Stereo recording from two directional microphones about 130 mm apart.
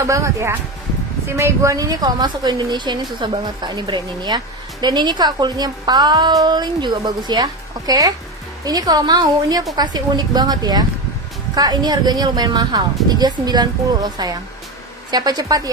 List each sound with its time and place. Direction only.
0.0 s a woman's voice: 20° right (ahead or behind)